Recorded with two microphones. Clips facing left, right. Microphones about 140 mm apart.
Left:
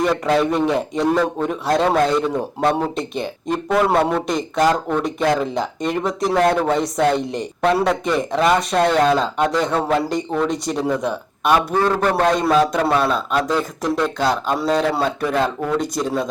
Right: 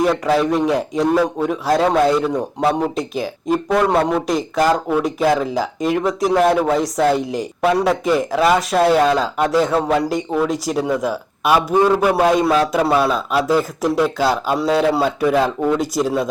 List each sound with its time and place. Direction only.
0.0 s a man's voice: centre (ahead or behind)